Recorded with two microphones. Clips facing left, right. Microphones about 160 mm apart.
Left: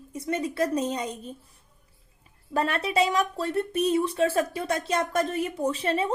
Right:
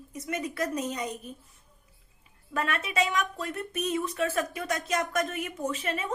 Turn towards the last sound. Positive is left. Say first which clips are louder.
# left 6 dB
turn(degrees=30)  # may be behind; listen again after turning